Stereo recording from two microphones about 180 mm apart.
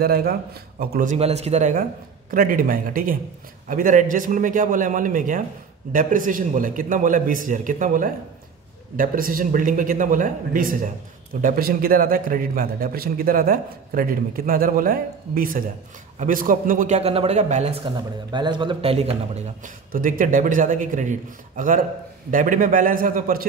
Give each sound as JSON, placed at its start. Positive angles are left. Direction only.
{"t": 0.0, "sound": "speech", "side_deg": -55}
{"t": 1.1, "sound": "a man's voice", "side_deg": -35}
{"t": 17.8, "sound": "a man's voice", "side_deg": -25}
{"t": 19.9, "sound": "a man's voice", "side_deg": -50}